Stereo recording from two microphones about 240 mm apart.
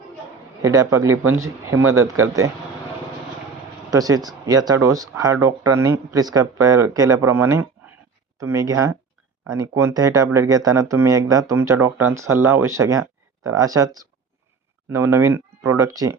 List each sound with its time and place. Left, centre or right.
0.6 s speech: centre
1.1 s speech: right
3.9 s speech: centre